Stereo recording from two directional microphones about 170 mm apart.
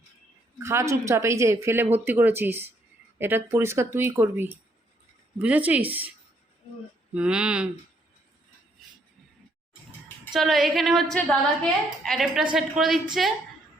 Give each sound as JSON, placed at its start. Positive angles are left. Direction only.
{"t": 0.6, "sound": "speech", "side_deg": -15}
{"t": 7.1, "sound": "a woman's voice", "side_deg": -5}
{"t": 10.3, "sound": "a woman's voice", "side_deg": 0}